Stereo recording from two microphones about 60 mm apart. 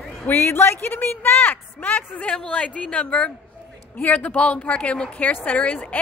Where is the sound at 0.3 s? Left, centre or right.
Left.